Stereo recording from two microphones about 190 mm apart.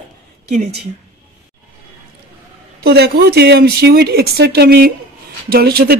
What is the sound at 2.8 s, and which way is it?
Speech, 55° right (ahead or behind).